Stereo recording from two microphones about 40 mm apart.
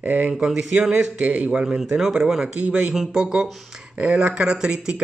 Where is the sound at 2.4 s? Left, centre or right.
Right.